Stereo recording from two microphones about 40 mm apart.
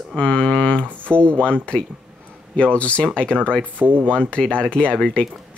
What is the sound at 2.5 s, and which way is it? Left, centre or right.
Speech, left.